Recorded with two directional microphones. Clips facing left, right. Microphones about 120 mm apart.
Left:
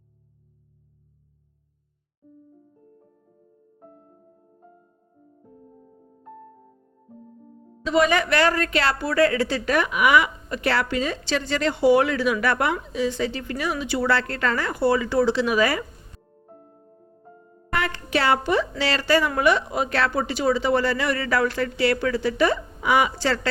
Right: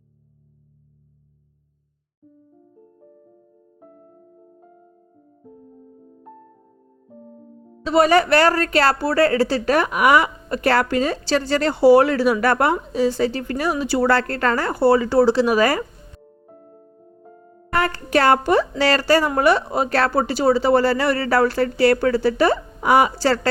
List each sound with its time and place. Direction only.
7.9 s a woman's voice: 40° right (ahead or behind)
17.7 s a sound: 40° right (ahead or behind)
18.8 s a woman's voice: 45° right (ahead or behind)